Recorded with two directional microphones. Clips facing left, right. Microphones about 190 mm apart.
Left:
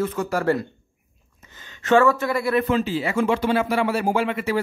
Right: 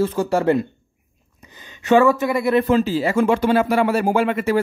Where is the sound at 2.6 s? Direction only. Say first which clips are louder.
Right 4 dB; 40° right (ahead or behind).